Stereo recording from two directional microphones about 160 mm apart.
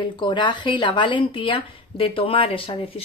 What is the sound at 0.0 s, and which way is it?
Speech, 30° left (ahead or behind).